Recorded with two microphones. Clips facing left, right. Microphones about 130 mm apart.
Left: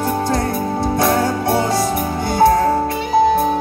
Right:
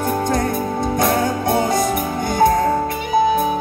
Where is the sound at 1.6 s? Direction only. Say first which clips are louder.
Even; 50° right (ahead or behind).